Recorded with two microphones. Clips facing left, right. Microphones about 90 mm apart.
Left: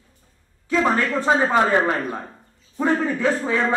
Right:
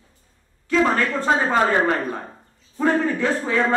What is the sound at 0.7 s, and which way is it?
A man's voice, 10° left (ahead or behind).